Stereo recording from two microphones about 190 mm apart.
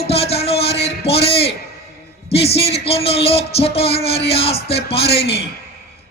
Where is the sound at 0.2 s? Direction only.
30° left (ahead or behind).